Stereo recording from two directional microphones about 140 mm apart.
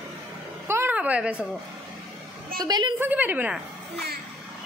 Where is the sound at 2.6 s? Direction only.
30° right (ahead or behind).